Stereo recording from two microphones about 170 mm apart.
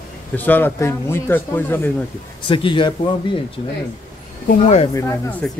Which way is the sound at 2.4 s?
30° left (ahead or behind).